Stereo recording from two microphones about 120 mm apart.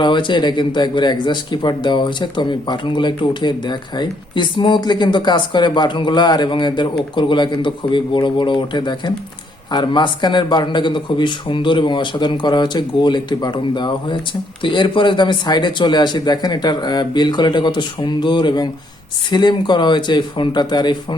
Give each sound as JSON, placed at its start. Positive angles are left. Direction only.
{"t": 0.0, "sound": "speech", "side_deg": 40}